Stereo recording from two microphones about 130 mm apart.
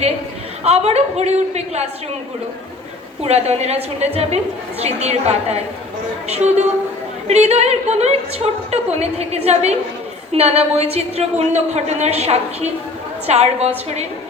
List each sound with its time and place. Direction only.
0.6 s a woman's voice: 55° right (ahead or behind)
3.2 s a woman's voice: 55° right (ahead or behind)